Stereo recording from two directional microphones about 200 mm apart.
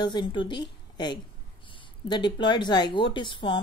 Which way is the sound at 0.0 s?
25° left (ahead or behind).